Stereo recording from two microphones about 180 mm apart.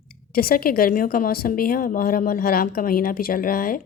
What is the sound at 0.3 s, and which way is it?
Speech, 55° left (ahead or behind).